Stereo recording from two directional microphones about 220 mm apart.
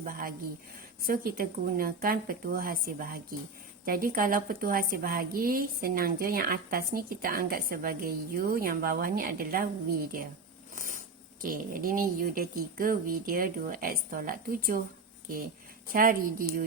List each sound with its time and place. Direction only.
0.0 s a woman's voice: 40° right (ahead or behind)
10.8 s a sound: 35° right (ahead or behind)
11.4 s a woman's voice: 40° right (ahead or behind)
15.9 s a woman's voice: 40° right (ahead or behind)